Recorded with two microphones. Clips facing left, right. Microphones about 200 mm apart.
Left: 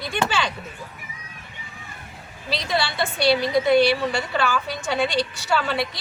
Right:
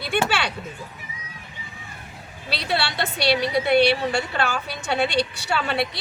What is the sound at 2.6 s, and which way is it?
A woman's voice, 65° right (ahead or behind).